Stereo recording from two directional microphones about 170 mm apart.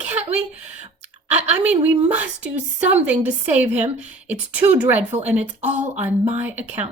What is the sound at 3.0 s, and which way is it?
A woman's voice, 10° right (ahead or behind).